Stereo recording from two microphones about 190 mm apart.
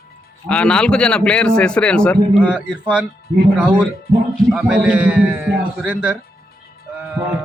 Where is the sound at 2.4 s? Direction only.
5° right (ahead or behind).